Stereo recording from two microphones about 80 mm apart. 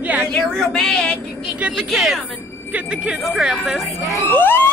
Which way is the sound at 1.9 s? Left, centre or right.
Centre.